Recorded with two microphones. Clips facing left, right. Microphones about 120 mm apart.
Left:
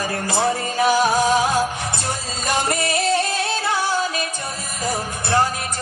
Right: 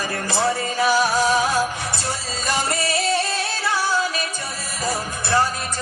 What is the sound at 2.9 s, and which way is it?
Music, 20° left (ahead or behind).